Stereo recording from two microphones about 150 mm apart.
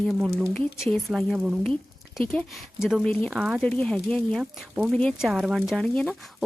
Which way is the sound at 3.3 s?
5° right (ahead or behind).